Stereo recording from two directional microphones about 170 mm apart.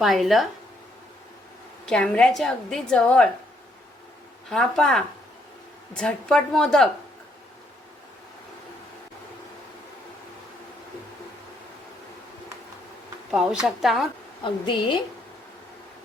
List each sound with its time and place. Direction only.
0.0 s a woman's voice: centre (ahead or behind)
1.9 s a woman's voice: 5° left (ahead or behind)
4.4 s a woman's voice: centre (ahead or behind)
13.3 s a woman's voice: 5° right (ahead or behind)
14.4 s a woman's voice: 30° left (ahead or behind)